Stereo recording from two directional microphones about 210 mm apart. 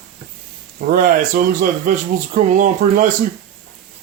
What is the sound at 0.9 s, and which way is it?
Speech, 40° right (ahead or behind).